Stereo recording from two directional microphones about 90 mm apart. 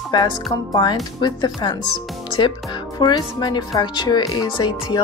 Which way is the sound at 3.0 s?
55° left (ahead or behind).